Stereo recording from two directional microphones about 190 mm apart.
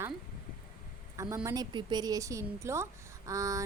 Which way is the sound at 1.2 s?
15° right (ahead or behind).